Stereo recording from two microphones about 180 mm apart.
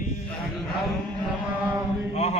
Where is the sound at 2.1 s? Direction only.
40° left (ahead or behind).